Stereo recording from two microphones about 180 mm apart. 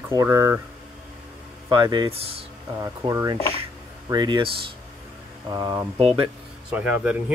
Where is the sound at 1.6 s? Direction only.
25° right (ahead or behind).